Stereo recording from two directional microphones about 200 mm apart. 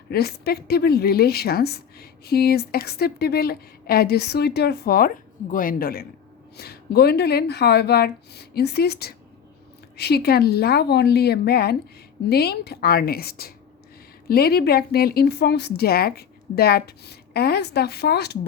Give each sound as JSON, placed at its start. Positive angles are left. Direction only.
{"t": 0.1, "sound": "a woman's voice", "side_deg": 50}